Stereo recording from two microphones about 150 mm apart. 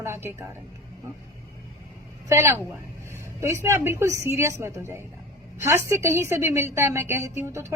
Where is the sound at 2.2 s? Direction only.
15° right (ahead or behind).